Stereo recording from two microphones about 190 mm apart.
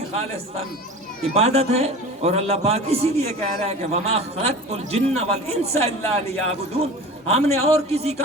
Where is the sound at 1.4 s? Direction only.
35° right (ahead or behind).